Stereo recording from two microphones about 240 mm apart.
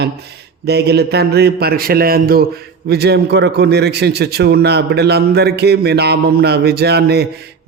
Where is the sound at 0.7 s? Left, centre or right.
Right.